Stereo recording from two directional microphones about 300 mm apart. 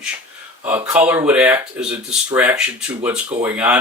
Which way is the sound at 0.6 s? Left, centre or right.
Centre.